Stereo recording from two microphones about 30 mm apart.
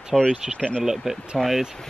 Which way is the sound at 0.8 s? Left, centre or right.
Centre.